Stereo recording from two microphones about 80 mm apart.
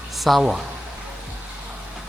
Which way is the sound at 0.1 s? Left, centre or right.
Centre.